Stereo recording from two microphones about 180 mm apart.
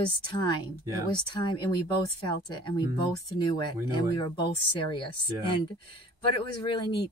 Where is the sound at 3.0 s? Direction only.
25° left (ahead or behind).